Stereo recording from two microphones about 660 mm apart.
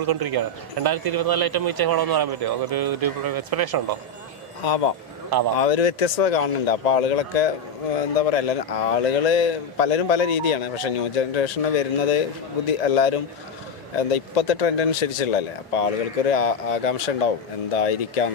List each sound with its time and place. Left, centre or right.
0.0 s speech: right
4.6 s speech: left